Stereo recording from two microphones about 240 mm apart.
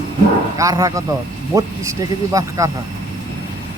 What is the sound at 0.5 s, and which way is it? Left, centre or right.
Speech, centre.